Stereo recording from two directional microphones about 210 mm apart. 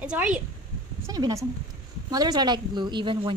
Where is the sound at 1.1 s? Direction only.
20° right (ahead or behind).